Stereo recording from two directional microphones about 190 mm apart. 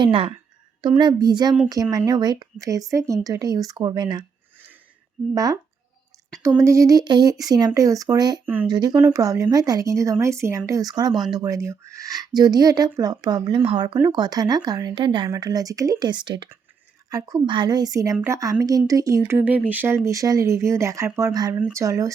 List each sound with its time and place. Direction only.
0.0 s speech: 30° right (ahead or behind)
5.3 s speech: 20° right (ahead or behind)
6.6 s speech: 15° right (ahead or behind)